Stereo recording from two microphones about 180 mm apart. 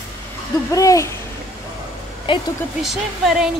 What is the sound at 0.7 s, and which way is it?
Speech, 20° left (ahead or behind).